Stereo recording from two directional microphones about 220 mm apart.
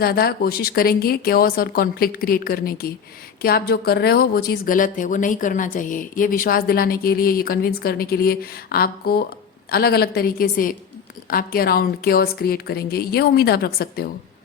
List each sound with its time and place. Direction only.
0.0 s speech: 45° left (ahead or behind)